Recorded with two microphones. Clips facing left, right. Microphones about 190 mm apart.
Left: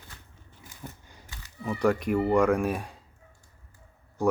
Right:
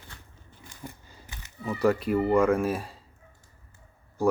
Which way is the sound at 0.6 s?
5° left (ahead or behind).